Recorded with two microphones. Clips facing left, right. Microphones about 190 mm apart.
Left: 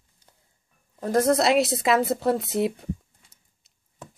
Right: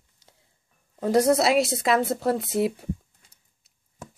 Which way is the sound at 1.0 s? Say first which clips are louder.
Right 2 dB; 15° right (ahead or behind).